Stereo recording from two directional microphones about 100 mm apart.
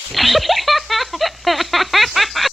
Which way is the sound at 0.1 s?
Centre (ahead or behind).